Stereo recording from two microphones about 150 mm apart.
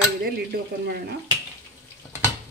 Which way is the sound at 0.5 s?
90° right.